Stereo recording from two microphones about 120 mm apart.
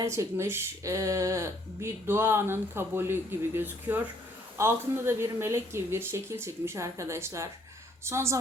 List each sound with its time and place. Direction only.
0.0 s speech: 25° right (ahead or behind)